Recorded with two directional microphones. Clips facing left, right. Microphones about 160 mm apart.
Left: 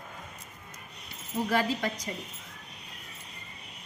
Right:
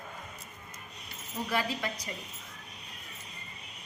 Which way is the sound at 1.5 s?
40° left (ahead or behind).